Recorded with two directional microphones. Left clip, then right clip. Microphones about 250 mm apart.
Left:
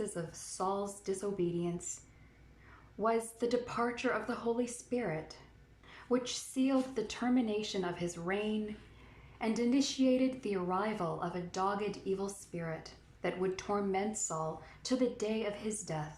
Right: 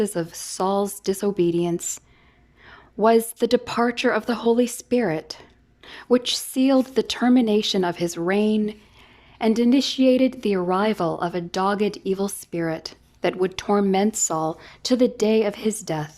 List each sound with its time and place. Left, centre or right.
0.0 s a woman's voice: right